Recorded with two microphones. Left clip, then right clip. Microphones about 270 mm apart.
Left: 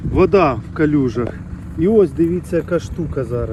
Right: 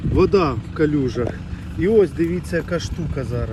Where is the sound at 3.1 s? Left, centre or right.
Centre.